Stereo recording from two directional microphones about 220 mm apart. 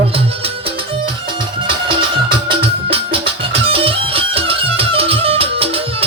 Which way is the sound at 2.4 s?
25° right (ahead or behind).